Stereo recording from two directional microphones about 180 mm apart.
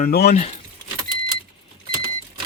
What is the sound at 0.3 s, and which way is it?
Speech, 35° left (ahead or behind).